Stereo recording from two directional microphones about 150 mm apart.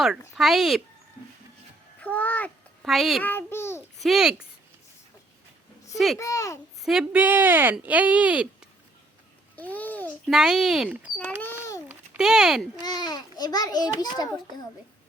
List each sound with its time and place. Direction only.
0.3 s speech: 5° right (ahead or behind)
2.0 s a child's voice: 10° left (ahead or behind)
2.8 s speech: centre (ahead or behind)
3.2 s a child's voice: 15° left (ahead or behind)
4.0 s speech: 5° right (ahead or behind)
5.9 s speech: centre (ahead or behind)
6.1 s a child's voice: 20° left (ahead or behind)
6.8 s speech: 5° right (ahead or behind)
9.6 s babbling: 10° left (ahead or behind)
10.2 s speech: 5° right (ahead or behind)
11.4 s a sound: 20° left (ahead or behind)
12.1 s speech: 5° right (ahead or behind)
12.8 s a child's voice: 25° left (ahead or behind)